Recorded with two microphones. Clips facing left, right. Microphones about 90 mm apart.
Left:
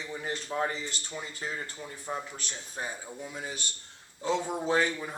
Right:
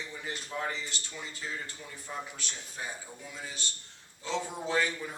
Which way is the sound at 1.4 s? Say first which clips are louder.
Left 2 dB; 45° left (ahead or behind).